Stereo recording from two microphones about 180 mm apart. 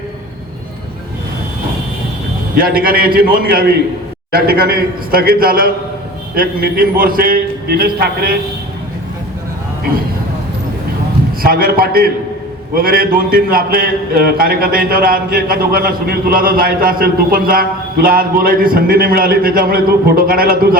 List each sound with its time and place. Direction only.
2.6 s a man's voice: 55° right (ahead or behind)
11.4 s a man's voice: 55° right (ahead or behind)